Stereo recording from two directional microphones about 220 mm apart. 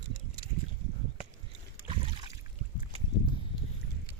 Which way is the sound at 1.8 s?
25° right (ahead or behind).